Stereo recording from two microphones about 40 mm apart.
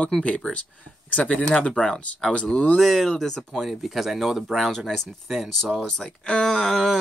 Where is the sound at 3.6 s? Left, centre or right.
Centre.